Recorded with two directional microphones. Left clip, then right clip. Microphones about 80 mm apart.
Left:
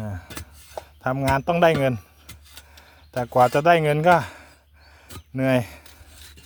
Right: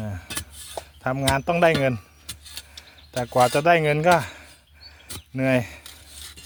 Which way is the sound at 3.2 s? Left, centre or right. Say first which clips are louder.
Left 1 dB; left.